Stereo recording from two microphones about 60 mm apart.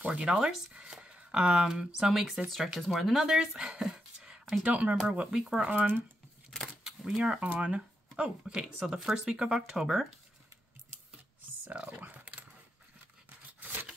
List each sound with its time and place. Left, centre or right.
0.0 s speech: centre
4.6 s speech: right
5.4 s speech: centre
5.7 s speech: right
6.8 s camera: centre
7.3 s speech: right
8.2 s speech: centre
11.6 s speech: right
12.0 s dog: right
13.6 s scissors: right